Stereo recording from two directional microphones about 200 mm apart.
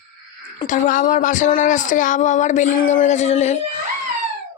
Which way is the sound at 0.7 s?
40° left (ahead or behind).